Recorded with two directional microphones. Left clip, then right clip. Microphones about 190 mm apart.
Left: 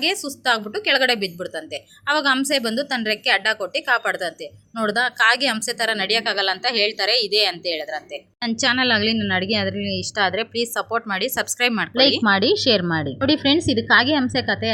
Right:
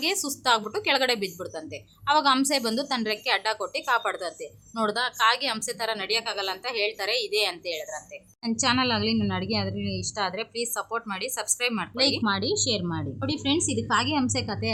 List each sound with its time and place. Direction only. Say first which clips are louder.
0.0 s a woman's voice: left 5 dB; 5° left (ahead or behind)